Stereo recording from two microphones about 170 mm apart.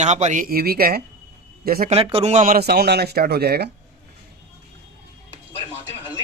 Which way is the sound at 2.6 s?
70° right (ahead or behind).